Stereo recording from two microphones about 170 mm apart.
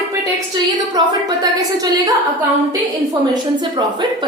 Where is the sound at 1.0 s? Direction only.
25° right (ahead or behind).